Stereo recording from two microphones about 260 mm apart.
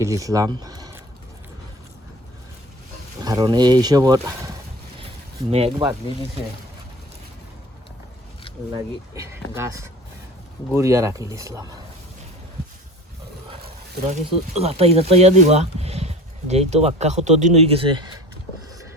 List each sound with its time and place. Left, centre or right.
0.0 s speech: centre
3.2 s speech: centre
5.5 s speech: right
8.7 s speech: centre
10.7 s speech: centre
14.1 s speech: right